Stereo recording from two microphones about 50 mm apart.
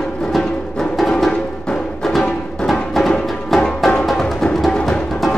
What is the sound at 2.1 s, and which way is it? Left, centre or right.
Music, centre.